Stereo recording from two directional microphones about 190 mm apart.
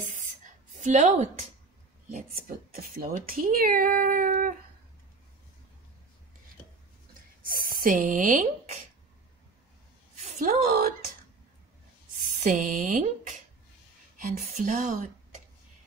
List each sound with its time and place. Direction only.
0.0 s a sound: 45° right (ahead or behind)
0.7 s a woman's voice: 40° right (ahead or behind)
7.4 s speech: 50° right (ahead or behind)
10.2 s a woman's voice: 45° right (ahead or behind)
12.4 s speech: 40° right (ahead or behind)